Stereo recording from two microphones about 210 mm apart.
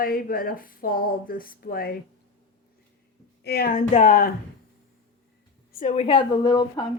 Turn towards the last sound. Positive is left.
turn(degrees=20)  # may be behind; listen again after turning